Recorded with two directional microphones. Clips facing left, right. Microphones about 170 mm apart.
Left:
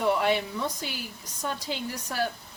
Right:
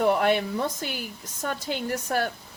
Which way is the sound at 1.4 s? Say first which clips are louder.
Right 3 dB; 55° right (ahead or behind).